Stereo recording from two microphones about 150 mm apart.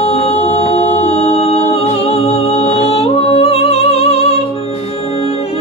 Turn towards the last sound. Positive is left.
turn(degrees=40)  # may be behind; listen again after turning